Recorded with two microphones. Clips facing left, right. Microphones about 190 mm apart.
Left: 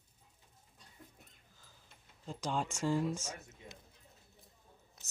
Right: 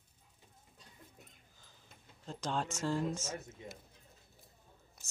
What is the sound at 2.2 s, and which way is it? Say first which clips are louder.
Speech: even; 10° left (ahead or behind).